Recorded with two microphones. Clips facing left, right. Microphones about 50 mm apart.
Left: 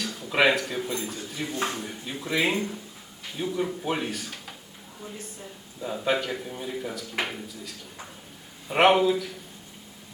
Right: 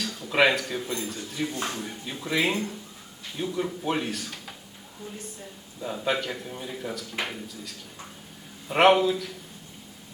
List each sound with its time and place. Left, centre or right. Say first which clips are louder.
0.3 s a man's voice: even; centre
1.5 s speech: left 6 dB; left
1.8 s a man's voice: even; centre
5.8 s a man's voice: left 1 dB; centre